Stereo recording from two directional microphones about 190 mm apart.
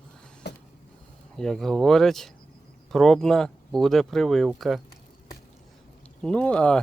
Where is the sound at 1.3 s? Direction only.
Centre (ahead or behind).